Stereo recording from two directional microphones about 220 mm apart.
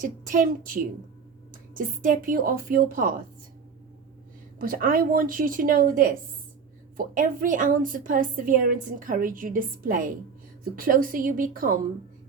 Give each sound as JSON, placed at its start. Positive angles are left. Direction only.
{"t": 0.0, "sound": "a woman's voice", "side_deg": -40}
{"t": 4.5, "sound": "a woman's voice", "side_deg": -40}